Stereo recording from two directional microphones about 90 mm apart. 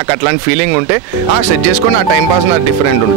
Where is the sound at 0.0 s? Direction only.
25° right (ahead or behind).